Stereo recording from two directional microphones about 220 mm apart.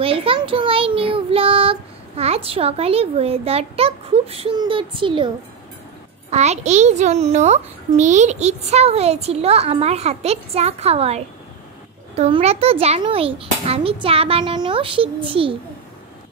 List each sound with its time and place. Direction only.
0.0 s child singing: 25° right (ahead or behind)
6.3 s a child's voice: 30° right (ahead or behind)